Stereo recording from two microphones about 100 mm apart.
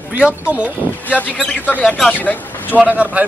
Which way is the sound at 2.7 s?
15° right (ahead or behind).